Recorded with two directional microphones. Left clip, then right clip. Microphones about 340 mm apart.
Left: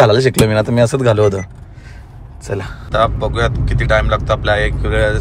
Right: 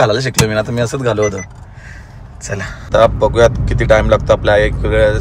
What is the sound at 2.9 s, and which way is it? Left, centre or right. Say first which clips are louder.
Speech: right 5 dB; centre.